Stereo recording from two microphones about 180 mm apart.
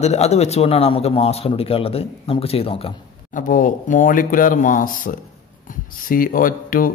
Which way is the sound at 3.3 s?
50° left (ahead or behind).